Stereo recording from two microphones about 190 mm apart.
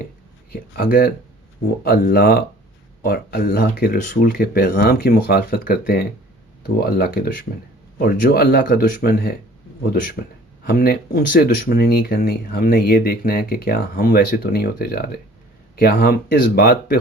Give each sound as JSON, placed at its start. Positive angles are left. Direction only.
{"t": 0.5, "sound": "speech", "side_deg": 50}
{"t": 10.7, "sound": "speech", "side_deg": 50}